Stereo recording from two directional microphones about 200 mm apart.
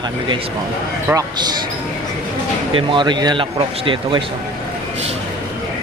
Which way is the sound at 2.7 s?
25° right (ahead or behind).